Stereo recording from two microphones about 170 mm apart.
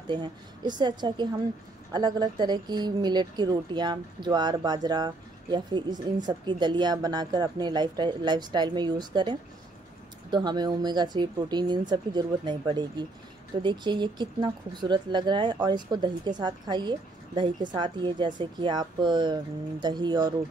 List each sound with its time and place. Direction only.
0.0 s speech: 25° right (ahead or behind)